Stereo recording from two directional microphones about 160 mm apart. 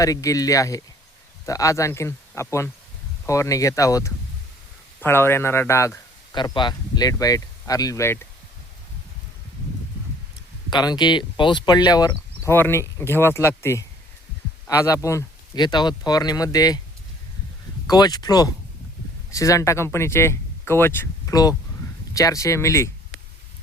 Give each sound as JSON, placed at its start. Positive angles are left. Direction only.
{"t": 0.0, "sound": "speech", "side_deg": 20}
{"t": 6.3, "sound": "speech", "side_deg": 30}
{"t": 10.7, "sound": "speech", "side_deg": 25}
{"t": 17.8, "sound": "speech", "side_deg": 25}